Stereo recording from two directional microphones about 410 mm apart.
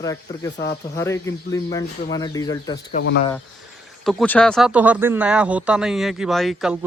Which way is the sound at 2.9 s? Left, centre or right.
Left.